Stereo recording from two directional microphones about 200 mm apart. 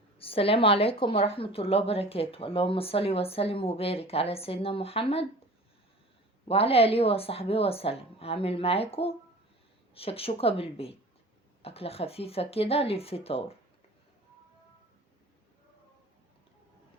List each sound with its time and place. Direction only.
0.2 s a woman's voice: 30° left (ahead or behind)
6.5 s a woman's voice: 30° left (ahead or behind)